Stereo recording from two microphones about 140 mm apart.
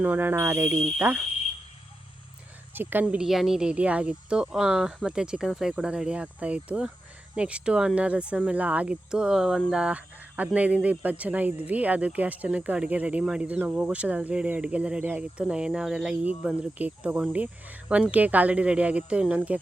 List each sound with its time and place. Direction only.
0.0 s speech: 15° right (ahead or behind)
2.7 s speech: 10° right (ahead or behind)
9.8 s speech: 10° right (ahead or behind)